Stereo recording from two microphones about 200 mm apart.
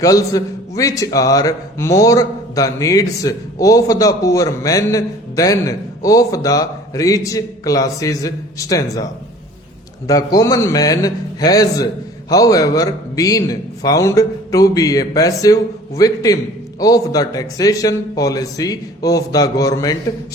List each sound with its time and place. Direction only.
0.0 s a man's voice: 15° left (ahead or behind)
10.1 s a man's voice: 15° left (ahead or behind)